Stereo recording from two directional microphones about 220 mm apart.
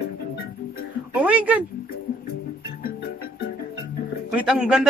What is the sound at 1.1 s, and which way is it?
Speech, 5° right (ahead or behind).